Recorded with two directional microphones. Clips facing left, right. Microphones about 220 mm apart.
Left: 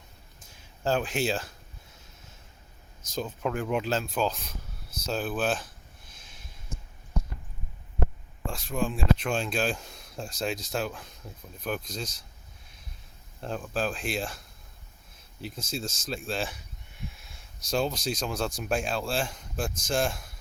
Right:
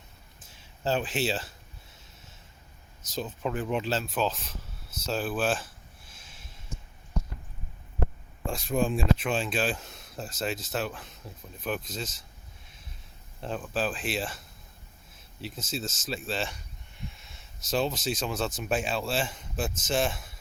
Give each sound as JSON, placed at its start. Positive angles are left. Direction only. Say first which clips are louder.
{"t": 0.9, "sound": "speech", "louder": "left 1 dB", "side_deg": -5}
{"t": 3.1, "sound": "speech", "louder": "left 1 dB", "side_deg": 0}
{"t": 8.5, "sound": "speech", "louder": "right 3 dB", "side_deg": -20}
{"t": 9.1, "sound": "speech", "louder": "even", "side_deg": -5}
{"t": 13.4, "sound": "speech", "louder": "even", "side_deg": -5}